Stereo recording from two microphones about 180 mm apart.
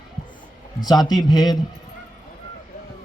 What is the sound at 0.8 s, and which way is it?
Speech, 20° left (ahead or behind).